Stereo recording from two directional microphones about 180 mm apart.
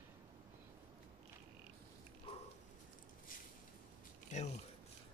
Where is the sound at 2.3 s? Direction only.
30° left (ahead or behind).